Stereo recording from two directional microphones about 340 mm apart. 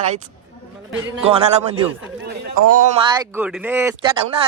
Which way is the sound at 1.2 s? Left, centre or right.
Centre.